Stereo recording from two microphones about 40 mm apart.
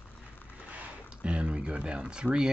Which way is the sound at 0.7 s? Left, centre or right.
Right.